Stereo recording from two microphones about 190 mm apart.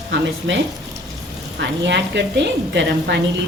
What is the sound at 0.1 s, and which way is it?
A woman's voice, 70° right (ahead or behind).